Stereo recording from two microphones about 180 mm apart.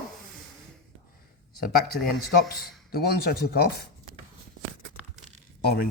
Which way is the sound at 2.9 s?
60° left (ahead or behind).